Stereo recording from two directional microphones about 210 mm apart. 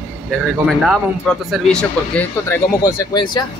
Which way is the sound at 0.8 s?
Centre (ahead or behind).